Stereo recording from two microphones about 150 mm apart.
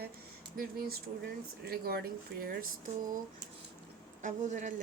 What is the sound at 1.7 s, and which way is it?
Speech, 90° right.